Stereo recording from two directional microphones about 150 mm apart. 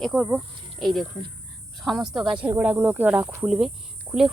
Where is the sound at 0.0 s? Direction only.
Centre (ahead or behind).